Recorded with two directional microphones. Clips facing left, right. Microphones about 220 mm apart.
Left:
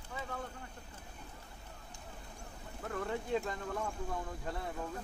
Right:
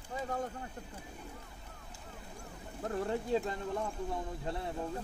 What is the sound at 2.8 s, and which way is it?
Speech, 35° right (ahead or behind).